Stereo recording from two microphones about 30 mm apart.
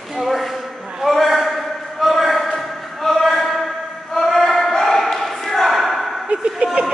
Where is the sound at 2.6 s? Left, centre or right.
Centre.